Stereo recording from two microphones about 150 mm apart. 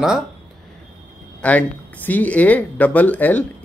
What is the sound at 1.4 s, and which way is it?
Speech, 10° left (ahead or behind).